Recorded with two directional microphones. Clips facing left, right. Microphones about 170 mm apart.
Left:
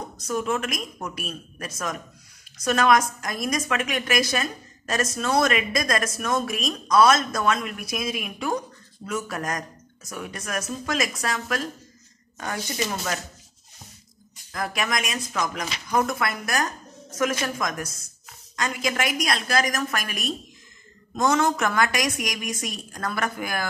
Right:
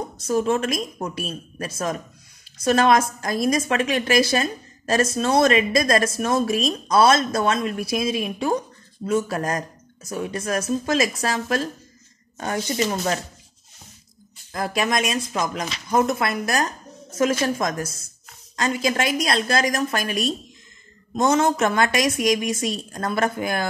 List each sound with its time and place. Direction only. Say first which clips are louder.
0.3 s a woman's voice: right 5 dB; 30° right (ahead or behind)
14.5 s a woman's voice: right 4 dB; 25° right (ahead or behind)